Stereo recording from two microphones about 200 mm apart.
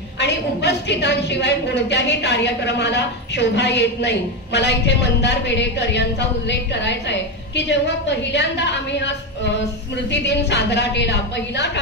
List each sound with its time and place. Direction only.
0.2 s a woman's voice: 60° left (ahead or behind)
10.1 s a woman's voice: 60° left (ahead or behind)